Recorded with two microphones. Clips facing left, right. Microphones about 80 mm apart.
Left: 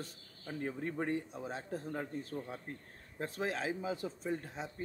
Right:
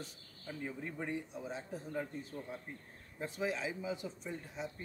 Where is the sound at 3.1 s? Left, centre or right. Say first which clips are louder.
Left 1 dB; left.